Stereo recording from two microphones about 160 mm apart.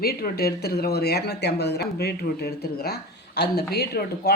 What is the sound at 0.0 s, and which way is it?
A woman's voice, 75° left (ahead or behind).